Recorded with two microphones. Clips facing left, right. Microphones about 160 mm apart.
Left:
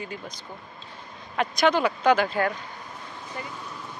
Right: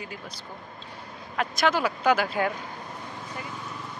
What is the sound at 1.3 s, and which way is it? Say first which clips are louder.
Speech: left 3 dB; centre (ahead or behind).